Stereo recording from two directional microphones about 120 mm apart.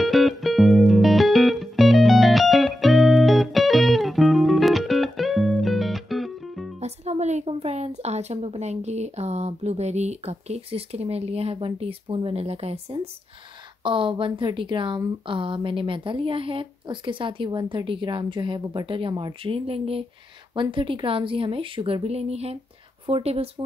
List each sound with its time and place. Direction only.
0.0 s music: centre (ahead or behind)
6.8 s a woman's voice: 65° right (ahead or behind)
13.8 s a woman's voice: 45° right (ahead or behind)